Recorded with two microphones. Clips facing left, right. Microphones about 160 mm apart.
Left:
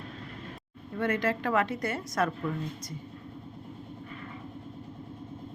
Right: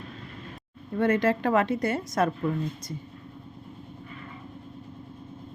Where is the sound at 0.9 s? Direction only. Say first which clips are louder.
Right 5 dB; 30° right (ahead or behind).